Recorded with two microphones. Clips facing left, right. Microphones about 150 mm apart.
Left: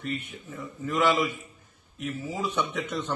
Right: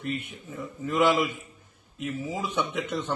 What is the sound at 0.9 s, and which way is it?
Speech, 15° right (ahead or behind).